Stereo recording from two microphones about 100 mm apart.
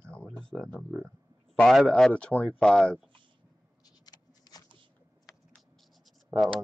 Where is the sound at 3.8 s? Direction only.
40° left (ahead or behind).